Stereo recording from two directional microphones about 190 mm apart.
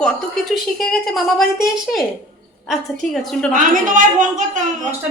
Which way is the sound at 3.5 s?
45° right (ahead or behind).